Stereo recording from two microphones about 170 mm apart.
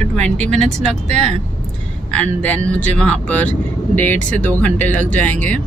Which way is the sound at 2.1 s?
5° left (ahead or behind).